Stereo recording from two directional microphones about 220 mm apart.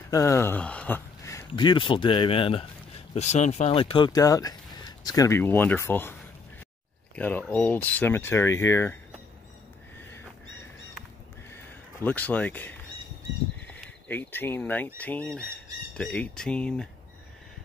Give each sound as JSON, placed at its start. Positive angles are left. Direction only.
{"t": 0.1, "sound": "speech", "side_deg": 15}
{"t": 7.2, "sound": "speech", "side_deg": 10}
{"t": 11.5, "sound": "neigh", "side_deg": 10}
{"t": 13.6, "sound": "horse", "side_deg": 5}
{"t": 15.0, "sound": "speech", "side_deg": 5}